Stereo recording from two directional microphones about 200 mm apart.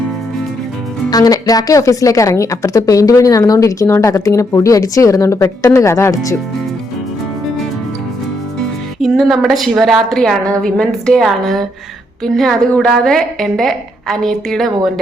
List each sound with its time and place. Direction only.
1.1 s a woman's voice: 20° left (ahead or behind)
8.6 s a woman's voice: centre (ahead or behind)